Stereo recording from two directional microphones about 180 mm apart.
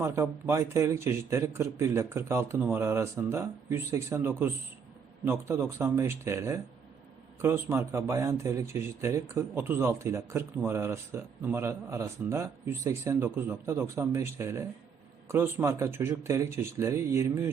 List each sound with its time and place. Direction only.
0.0 s a man's voice: 15° right (ahead or behind)